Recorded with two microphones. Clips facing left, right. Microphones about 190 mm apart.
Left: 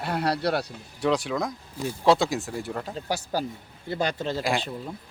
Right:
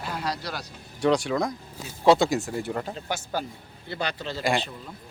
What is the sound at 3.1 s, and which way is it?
A man's voice, 35° left (ahead or behind).